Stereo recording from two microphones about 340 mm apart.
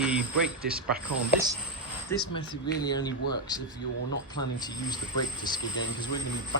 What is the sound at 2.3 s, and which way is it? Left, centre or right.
Speech, centre.